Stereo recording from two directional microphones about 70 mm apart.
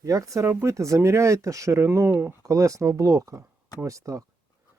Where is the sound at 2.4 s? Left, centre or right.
Right.